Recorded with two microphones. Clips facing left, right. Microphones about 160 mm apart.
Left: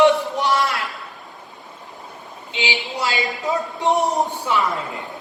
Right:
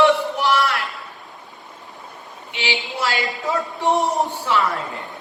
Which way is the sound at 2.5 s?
20° left (ahead or behind).